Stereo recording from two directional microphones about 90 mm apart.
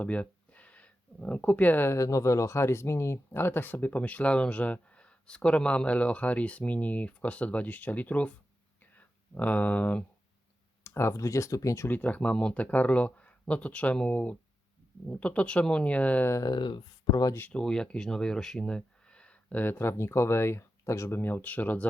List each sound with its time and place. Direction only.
0.0 s a sound: 15° left (ahead or behind)
2.0 s speech: 35° left (ahead or behind); by 8.3 s 15° left (ahead or behind)
8.8 s a sound: 20° left (ahead or behind)
10.8 s speech: 30° left (ahead or behind)
11.9 s speech: 20° left (ahead or behind)
16.3 s speech: 45° left (ahead or behind)
17.5 s speech: 10° left (ahead or behind)